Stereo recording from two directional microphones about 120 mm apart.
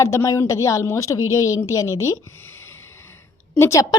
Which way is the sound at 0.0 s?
25° left (ahead or behind).